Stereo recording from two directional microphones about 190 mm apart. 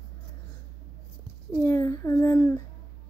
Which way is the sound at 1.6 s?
15° left (ahead or behind).